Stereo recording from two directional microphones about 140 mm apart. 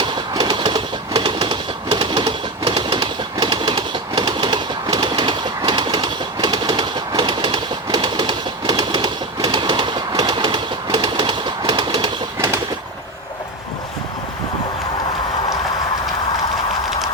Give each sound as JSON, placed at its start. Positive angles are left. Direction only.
{"t": 0.0, "sound": "train", "side_deg": -35}
{"t": 3.3, "sound": "bird", "side_deg": -35}